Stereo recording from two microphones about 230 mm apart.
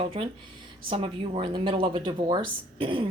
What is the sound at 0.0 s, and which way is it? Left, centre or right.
A woman's voice, right.